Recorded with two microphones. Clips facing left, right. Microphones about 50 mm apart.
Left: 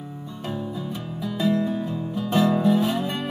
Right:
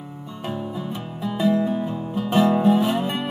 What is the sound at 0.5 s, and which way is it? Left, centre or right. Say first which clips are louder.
Music: right 1 dB; centre.